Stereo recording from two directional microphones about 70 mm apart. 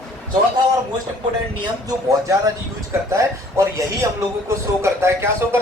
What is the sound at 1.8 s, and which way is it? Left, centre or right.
Speech, right.